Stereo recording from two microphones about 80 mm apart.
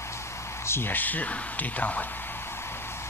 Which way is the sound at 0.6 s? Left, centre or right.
Left.